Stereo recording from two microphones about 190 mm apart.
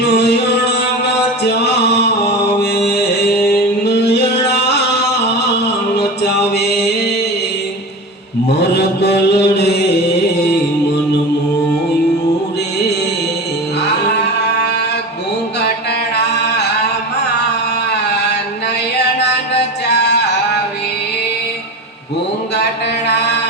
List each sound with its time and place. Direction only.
0.0 s music: 60° left (ahead or behind)
3.8 s music: 60° left (ahead or behind)
6.5 s music: 60° left (ahead or behind)
8.4 s mantra: 60° left (ahead or behind)
19.2 s music: 60° left (ahead or behind)